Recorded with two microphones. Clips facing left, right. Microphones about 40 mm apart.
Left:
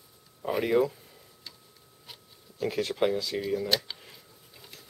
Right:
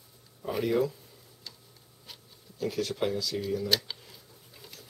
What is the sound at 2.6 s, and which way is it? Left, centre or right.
Speech, left.